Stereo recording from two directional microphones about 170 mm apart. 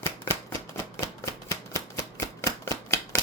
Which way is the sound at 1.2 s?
20° left (ahead or behind).